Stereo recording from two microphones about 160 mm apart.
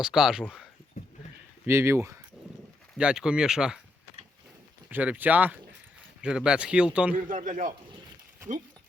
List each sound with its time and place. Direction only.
0.0 s speech: 5° right (ahead or behind)
1.0 s a sound: 50° left (ahead or behind)
1.6 s speech: 15° right (ahead or behind)
3.0 s speech: 5° right (ahead or behind)
4.9 s speech: 10° right (ahead or behind)
7.3 s a man's voice: 55° right (ahead or behind)